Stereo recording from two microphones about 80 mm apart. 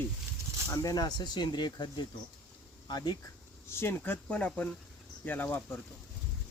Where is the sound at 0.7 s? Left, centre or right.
Left.